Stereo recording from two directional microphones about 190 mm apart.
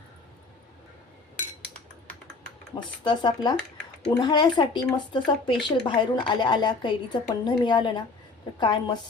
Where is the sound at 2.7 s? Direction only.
25° left (ahead or behind).